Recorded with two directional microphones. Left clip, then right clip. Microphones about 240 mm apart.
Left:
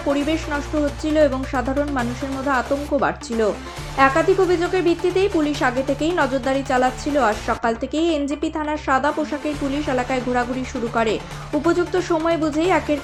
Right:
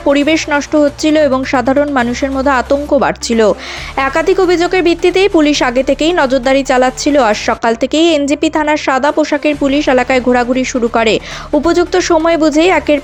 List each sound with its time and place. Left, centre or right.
0.1 s speech: right